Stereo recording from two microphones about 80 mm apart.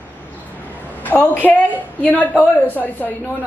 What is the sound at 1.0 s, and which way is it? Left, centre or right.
Speech, left.